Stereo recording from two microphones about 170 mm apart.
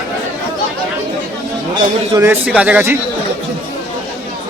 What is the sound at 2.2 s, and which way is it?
Speech, 10° right (ahead or behind).